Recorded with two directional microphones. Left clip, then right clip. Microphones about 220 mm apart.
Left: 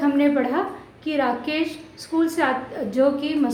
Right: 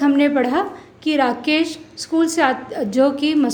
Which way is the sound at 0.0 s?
45° right (ahead or behind).